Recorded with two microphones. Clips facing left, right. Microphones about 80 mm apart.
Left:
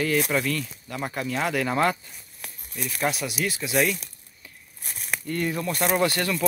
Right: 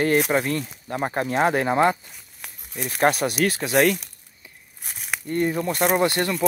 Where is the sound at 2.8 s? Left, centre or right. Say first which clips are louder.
Right 7 dB; right.